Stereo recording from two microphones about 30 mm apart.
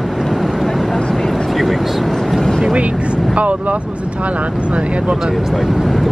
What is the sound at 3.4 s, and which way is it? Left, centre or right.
Speech, right.